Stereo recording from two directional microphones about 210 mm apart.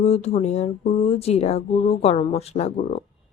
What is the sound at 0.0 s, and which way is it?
Speech, 30° left (ahead or behind).